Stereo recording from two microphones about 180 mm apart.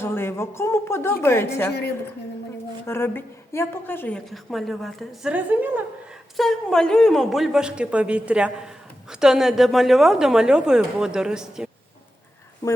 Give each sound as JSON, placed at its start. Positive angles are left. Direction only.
{"t": 0.0, "sound": "a woman's voice", "side_deg": 15}
{"t": 2.8, "sound": "a woman's voice", "side_deg": 15}
{"t": 12.6, "sound": "speech", "side_deg": 20}